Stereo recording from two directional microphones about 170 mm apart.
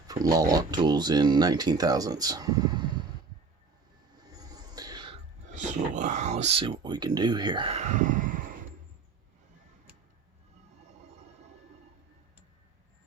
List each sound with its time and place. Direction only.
0.1 s speech: 20° right (ahead or behind)
4.3 s a sound: 20° right (ahead or behind)
5.5 s speech: 45° right (ahead or behind)